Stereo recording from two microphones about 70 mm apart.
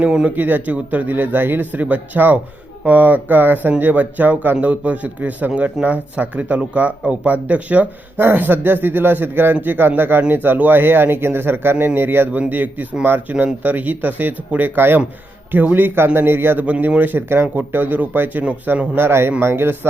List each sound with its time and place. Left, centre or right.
0.0 s a man's voice: centre; by 19.9 s right